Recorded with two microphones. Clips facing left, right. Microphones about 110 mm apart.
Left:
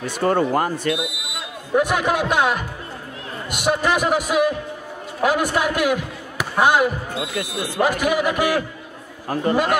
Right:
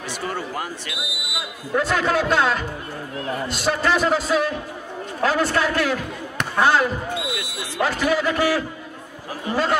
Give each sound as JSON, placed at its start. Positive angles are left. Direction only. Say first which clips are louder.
{"t": 0.0, "sound": "speech", "louder": "left 9 dB", "side_deg": 50}
{"t": 0.9, "sound": "speech", "louder": "left 4 dB", "side_deg": -5}
{"t": 1.8, "sound": "a man's voice", "louder": "left 1 dB", "side_deg": 15}
{"t": 7.2, "sound": "speech", "louder": "left 3 dB", "side_deg": 45}
{"t": 7.8, "sound": "a man's voice", "louder": "left 1 dB", "side_deg": 15}
{"t": 9.5, "sound": "speech", "louder": "left 4 dB", "side_deg": 55}